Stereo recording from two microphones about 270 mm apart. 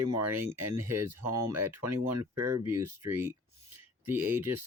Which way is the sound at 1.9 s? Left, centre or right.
Right.